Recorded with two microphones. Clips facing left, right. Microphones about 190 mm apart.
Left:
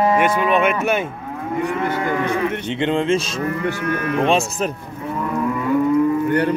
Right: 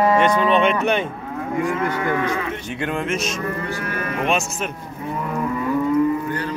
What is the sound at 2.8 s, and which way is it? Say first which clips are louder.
Speech: left 6 dB; 25° left (ahead or behind).